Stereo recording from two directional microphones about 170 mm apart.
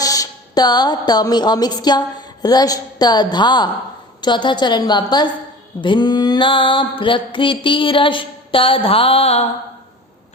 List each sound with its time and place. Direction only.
0.0 s music: 20° left (ahead or behind)
4.2 s mantra: 25° left (ahead or behind)